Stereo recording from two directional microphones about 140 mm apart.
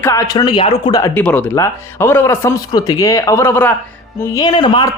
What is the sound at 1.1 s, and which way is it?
Speech, 10° left (ahead or behind).